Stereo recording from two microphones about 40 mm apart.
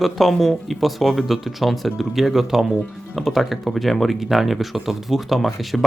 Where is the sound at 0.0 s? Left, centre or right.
Centre.